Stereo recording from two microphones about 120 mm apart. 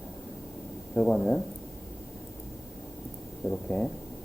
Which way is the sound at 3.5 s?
5° left (ahead or behind).